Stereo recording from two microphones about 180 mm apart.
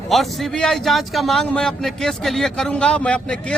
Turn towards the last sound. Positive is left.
turn(degrees=5)  # may be behind; listen again after turning